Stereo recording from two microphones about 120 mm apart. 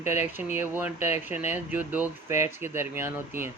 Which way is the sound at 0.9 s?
75° left (ahead or behind).